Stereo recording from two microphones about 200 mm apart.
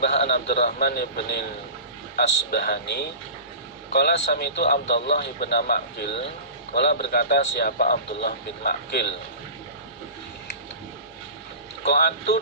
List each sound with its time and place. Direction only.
0.0 s a man's voice: 55° left (ahead or behind)
11.9 s a man's voice: 55° left (ahead or behind)